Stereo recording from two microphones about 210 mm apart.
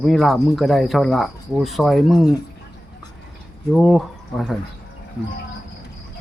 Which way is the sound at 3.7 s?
Centre (ahead or behind).